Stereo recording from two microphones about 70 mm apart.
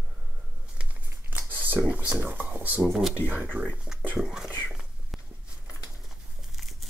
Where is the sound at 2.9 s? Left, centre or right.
Centre.